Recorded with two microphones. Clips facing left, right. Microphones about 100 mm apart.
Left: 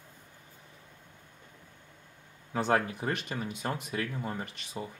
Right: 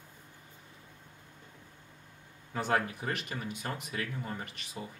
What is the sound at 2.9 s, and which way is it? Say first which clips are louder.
Speech: left 3 dB; 30° left (ahead or behind).